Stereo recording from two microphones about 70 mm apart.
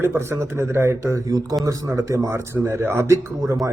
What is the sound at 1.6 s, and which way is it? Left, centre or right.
Speech, right.